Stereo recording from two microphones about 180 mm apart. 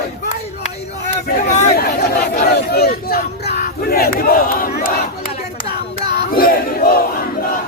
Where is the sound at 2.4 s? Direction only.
60° left (ahead or behind).